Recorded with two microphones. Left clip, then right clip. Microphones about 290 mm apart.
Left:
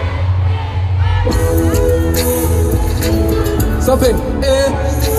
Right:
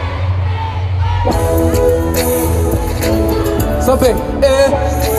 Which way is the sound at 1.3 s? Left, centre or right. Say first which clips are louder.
Right 2 dB; right.